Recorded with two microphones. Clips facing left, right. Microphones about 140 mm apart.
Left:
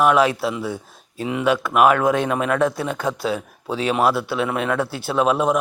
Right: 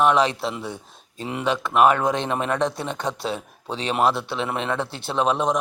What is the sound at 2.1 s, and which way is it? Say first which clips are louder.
Speech: left 4 dB; 25° right (ahead or behind).